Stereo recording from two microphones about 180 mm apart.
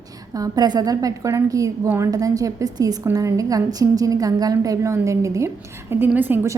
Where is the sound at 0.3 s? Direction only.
20° right (ahead or behind).